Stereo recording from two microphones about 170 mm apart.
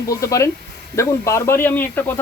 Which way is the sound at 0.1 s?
20° left (ahead or behind).